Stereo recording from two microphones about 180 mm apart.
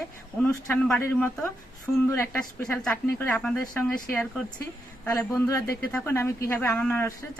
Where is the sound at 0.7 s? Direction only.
5° left (ahead or behind).